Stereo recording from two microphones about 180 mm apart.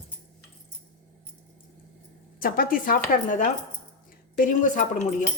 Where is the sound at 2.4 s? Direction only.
55° left (ahead or behind).